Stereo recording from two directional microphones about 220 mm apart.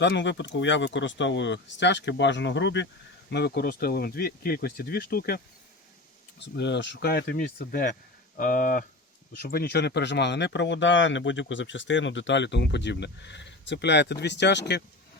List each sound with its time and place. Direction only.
0.0 s speech: 55° left (ahead or behind)
6.4 s speech: 50° left (ahead or behind)